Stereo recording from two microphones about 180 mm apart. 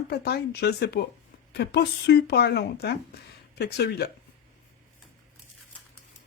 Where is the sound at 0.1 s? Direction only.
65° left (ahead or behind).